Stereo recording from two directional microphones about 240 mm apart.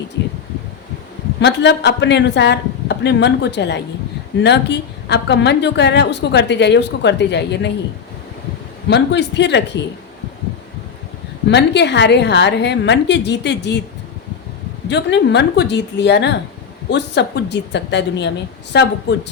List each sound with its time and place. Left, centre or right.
1.4 s a woman's voice: left
8.9 s a woman's voice: left
11.4 s a woman's voice: left
14.8 s a woman's voice: left